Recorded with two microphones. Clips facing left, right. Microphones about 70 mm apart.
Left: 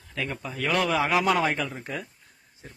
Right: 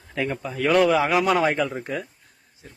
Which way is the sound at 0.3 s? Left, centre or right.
Centre.